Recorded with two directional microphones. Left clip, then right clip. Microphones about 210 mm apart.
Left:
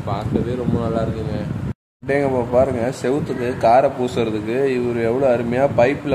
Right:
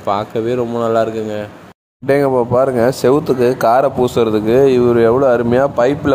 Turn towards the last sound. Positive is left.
turn(degrees=-30)  # may be behind; listen again after turning